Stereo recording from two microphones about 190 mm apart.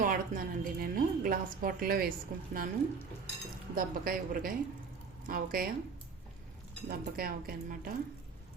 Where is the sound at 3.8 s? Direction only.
50° right (ahead or behind).